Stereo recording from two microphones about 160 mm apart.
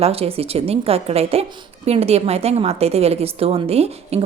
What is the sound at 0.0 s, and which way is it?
Speech, 40° right (ahead or behind).